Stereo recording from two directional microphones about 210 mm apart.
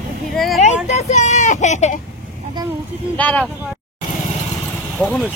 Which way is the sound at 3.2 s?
5° left (ahead or behind).